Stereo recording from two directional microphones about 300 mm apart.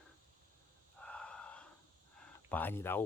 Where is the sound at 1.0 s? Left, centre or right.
Centre.